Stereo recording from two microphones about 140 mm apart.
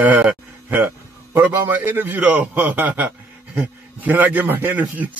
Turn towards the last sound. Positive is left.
turn(degrees=-10)  # may be behind; listen again after turning